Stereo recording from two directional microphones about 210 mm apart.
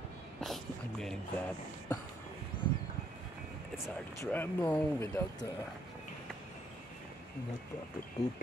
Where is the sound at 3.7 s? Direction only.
10° left (ahead or behind).